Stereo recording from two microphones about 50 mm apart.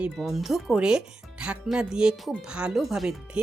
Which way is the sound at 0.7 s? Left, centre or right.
Centre.